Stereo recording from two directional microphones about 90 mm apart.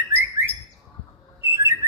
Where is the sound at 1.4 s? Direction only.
30° right (ahead or behind).